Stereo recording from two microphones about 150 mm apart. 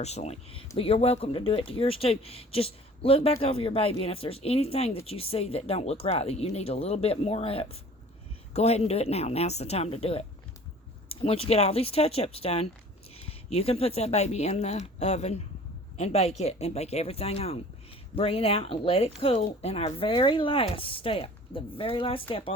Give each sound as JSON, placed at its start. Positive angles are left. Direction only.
{"t": 0.0, "sound": "speech", "side_deg": 45}